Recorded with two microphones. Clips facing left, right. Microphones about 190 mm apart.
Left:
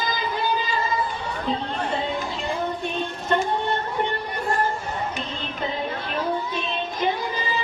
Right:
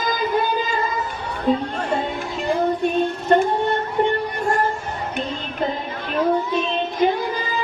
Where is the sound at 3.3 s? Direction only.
45° right (ahead or behind).